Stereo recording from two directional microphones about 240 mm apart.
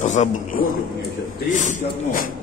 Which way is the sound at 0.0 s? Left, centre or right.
Left.